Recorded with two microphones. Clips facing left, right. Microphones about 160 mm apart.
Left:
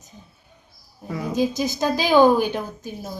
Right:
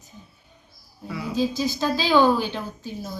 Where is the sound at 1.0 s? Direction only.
45° left (ahead or behind).